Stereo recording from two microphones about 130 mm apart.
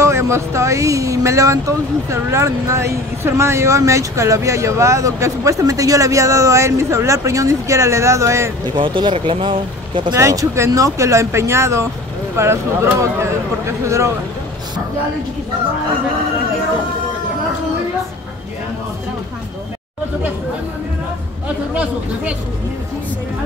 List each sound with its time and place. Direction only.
0.0 s speech: 20° right (ahead or behind)
8.7 s speech: 40° right (ahead or behind)
10.1 s speech: 25° right (ahead or behind)